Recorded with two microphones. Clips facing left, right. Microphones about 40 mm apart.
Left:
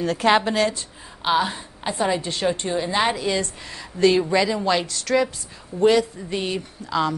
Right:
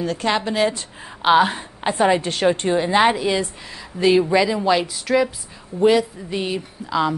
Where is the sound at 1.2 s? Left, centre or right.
Right.